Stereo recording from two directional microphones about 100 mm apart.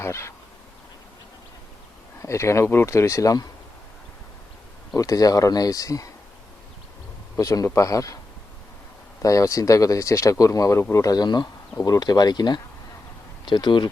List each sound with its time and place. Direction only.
0.0 s speech: 30° left (ahead or behind)
2.2 s speech: 30° left (ahead or behind)
4.9 s speech: 35° left (ahead or behind)
7.3 s speech: 35° left (ahead or behind)
9.2 s speech: 35° left (ahead or behind); by 13.9 s 50° left (ahead or behind)